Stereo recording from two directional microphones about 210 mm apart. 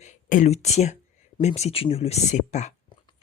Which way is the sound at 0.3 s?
35° left (ahead or behind).